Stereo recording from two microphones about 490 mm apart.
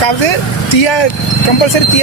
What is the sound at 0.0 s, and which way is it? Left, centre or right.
Speech, left.